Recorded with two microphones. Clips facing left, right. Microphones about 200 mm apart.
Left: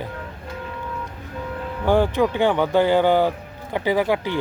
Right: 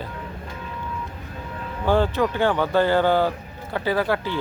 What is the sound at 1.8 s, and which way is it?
Speech, 15° left (ahead or behind).